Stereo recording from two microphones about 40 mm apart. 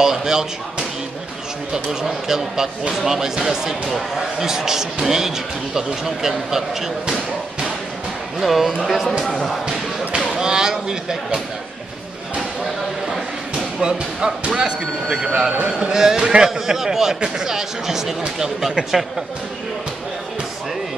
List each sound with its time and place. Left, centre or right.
0.0 s speech: centre
8.4 s speech: centre
9.2 s speech: centre
9.7 s a sound: centre
13.7 s speech: centre
15.5 s speech: right; by 18.1 s centre